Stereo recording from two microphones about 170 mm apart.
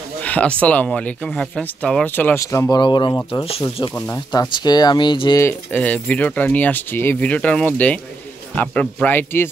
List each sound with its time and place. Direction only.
0.2 s speech: 10° left (ahead or behind); by 3.9 s 30° left (ahead or behind)
3.9 s speech: 15° left (ahead or behind)
5.4 s speech: 10° left (ahead or behind)